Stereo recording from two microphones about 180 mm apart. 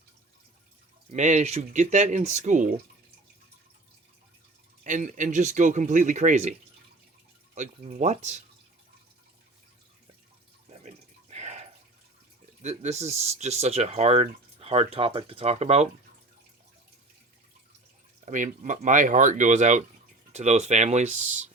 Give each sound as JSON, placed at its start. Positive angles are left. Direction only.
{"t": 1.1, "sound": "speech", "side_deg": -40}
{"t": 4.8, "sound": "speech", "side_deg": -45}
{"t": 7.5, "sound": "speech", "side_deg": -40}
{"t": 10.7, "sound": "water", "side_deg": -40}
{"t": 12.6, "sound": "speech", "side_deg": -40}
{"t": 18.3, "sound": "speech", "side_deg": -45}